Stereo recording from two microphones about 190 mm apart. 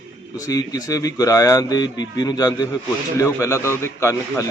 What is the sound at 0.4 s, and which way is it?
A man's voice, 20° left (ahead or behind).